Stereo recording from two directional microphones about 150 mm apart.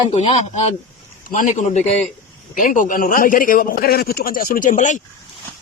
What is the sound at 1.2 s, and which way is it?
Speech, 60° left (ahead or behind).